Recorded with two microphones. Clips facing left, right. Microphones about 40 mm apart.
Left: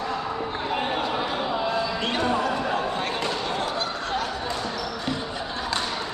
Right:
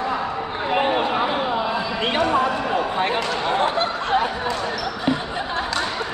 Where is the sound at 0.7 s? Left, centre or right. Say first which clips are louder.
Right 7 dB; right.